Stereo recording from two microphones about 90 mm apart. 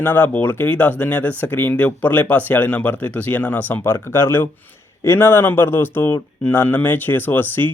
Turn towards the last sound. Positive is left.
turn(degrees=20)  # may be behind; listen again after turning